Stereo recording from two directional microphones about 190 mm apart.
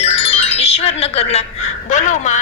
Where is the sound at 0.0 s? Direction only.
30° left (ahead or behind).